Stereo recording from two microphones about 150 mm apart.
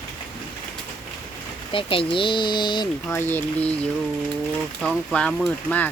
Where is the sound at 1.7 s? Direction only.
35° left (ahead or behind).